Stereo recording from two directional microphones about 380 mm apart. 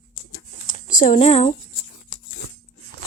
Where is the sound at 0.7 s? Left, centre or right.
Left.